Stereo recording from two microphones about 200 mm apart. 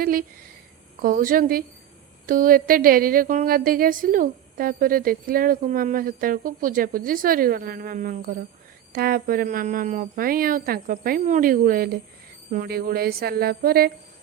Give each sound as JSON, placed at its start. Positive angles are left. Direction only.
{"t": 0.0, "sound": "a woman's voice", "side_deg": -45}